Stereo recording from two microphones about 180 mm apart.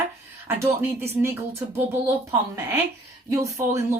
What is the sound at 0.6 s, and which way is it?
Speech, 15° right (ahead or behind).